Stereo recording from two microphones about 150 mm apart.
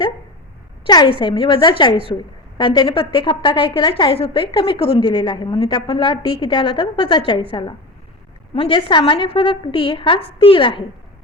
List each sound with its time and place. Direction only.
0.9 s a woman's voice: 25° left (ahead or behind)
8.5 s a woman's voice: 35° left (ahead or behind)